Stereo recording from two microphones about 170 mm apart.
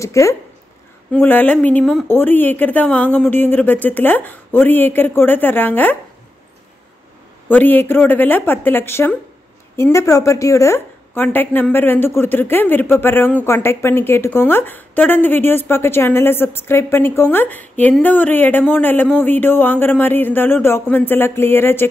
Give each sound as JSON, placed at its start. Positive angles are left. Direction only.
{"t": 0.0, "sound": "a woman's voice", "side_deg": 20}
{"t": 7.4, "sound": "a woman's voice", "side_deg": 10}